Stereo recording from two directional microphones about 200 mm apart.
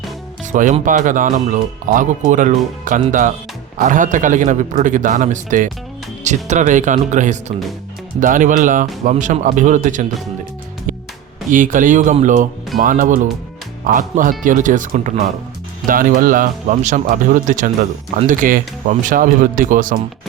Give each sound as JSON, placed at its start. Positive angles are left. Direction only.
{"t": 0.5, "sound": "speech", "side_deg": -40}
{"t": 11.5, "sound": "speech", "side_deg": -40}